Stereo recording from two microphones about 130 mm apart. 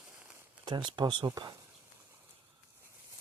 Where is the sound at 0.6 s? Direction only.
35° right (ahead or behind).